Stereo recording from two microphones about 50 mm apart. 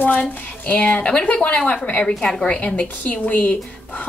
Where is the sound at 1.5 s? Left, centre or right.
Centre.